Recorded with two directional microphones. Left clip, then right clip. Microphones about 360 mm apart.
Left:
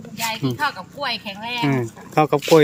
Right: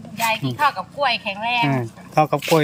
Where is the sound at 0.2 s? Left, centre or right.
Centre.